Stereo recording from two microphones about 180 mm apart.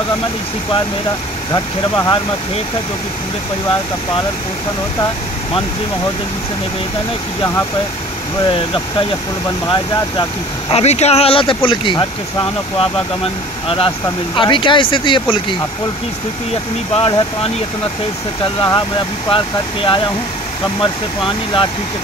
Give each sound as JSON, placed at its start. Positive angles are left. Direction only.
{"t": 1.5, "sound": "speech", "side_deg": 20}
{"t": 8.5, "sound": "speech", "side_deg": 25}
{"t": 10.7, "sound": "speech", "side_deg": 35}
{"t": 16.9, "sound": "speech", "side_deg": 30}